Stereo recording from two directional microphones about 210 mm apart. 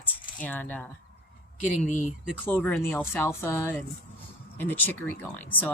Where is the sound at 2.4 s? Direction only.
10° left (ahead or behind).